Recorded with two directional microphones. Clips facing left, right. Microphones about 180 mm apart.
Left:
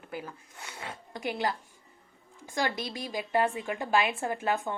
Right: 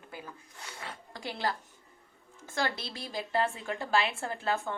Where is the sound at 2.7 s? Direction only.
15° left (ahead or behind).